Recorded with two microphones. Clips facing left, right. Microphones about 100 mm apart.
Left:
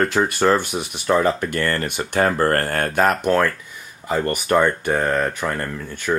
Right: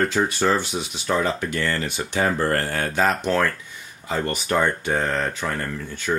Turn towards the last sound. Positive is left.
turn(degrees=70)  # may be behind; listen again after turning